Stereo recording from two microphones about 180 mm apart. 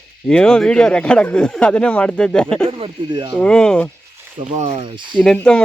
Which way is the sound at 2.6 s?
30° right (ahead or behind).